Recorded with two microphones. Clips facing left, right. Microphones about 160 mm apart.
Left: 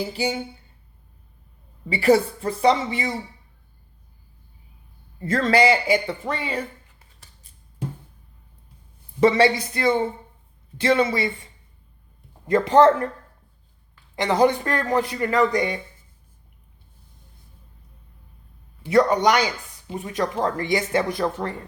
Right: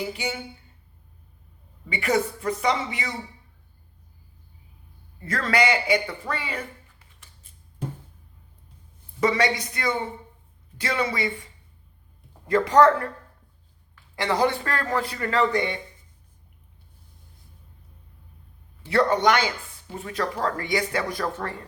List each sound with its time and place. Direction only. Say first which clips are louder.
0.0 s a woman's voice: left 5 dB; 30° left (ahead or behind)
1.9 s a woman's voice: left 6 dB; 30° left (ahead or behind)
5.2 s speech: left 5 dB; 30° left (ahead or behind)
9.2 s speech: left 6 dB; 30° left (ahead or behind)
12.5 s speech: left 2 dB; 25° left (ahead or behind)
14.2 s speech: left 4 dB; 20° left (ahead or behind)
18.9 s a man's voice: left 3 dB; 15° left (ahead or behind)